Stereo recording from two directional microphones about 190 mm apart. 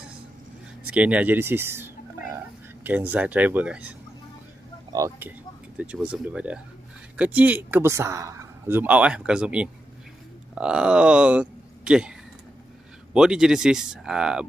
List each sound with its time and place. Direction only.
0.8 s speech: 5° right (ahead or behind)
4.9 s a man's voice: 15° right (ahead or behind)